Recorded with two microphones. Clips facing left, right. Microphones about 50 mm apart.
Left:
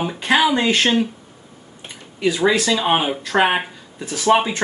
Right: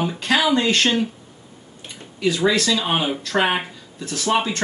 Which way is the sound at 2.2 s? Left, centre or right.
Left.